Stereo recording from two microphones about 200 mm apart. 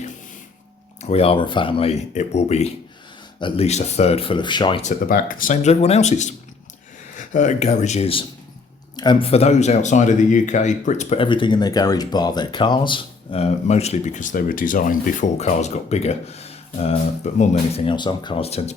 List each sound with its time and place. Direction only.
1.0 s speech: 30° left (ahead or behind)
4.9 s speech: 45° left (ahead or behind)